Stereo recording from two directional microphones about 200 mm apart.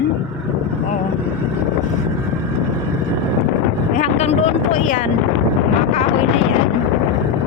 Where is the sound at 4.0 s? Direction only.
35° left (ahead or behind).